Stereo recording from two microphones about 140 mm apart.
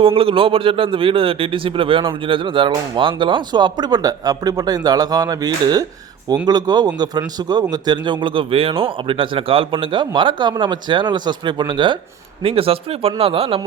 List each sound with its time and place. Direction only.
0.0 s a man's voice: 40° right (ahead or behind)